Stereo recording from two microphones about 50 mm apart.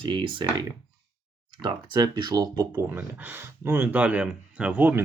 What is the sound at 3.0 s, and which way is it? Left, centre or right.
Speech, right.